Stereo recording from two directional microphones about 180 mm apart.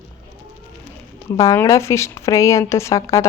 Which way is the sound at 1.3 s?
15° left (ahead or behind).